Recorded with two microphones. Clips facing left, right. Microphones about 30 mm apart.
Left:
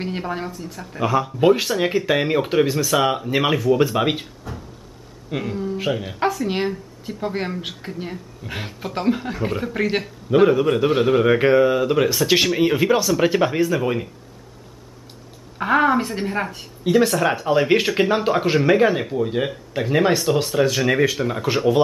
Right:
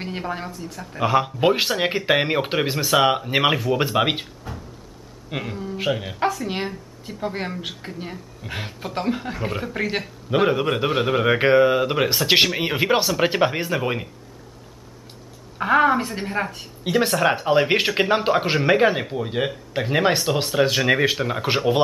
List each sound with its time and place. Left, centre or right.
0.0 s speech: centre
1.0 s speech: right; by 6.1 s centre
6.1 s speech: centre
10.5 s speech: centre
10.9 s speech: centre
15.5 s speech: centre
16.8 s speech: centre